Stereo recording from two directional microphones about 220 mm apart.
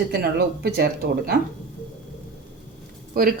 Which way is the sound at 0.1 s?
45° right (ahead or behind).